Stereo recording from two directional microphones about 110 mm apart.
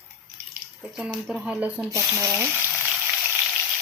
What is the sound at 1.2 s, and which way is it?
Speech, 5° right (ahead or behind).